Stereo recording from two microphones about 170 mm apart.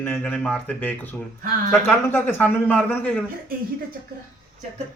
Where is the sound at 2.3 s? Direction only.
10° left (ahead or behind).